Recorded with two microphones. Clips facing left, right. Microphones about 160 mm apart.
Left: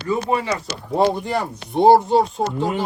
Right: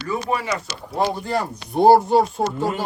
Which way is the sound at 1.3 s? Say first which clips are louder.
Even; centre (ahead or behind).